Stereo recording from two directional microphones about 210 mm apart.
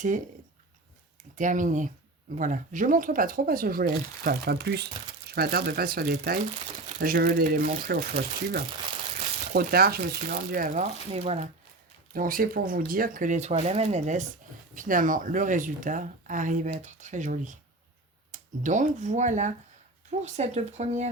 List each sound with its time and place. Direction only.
1.4 s speech: 40° right (ahead or behind)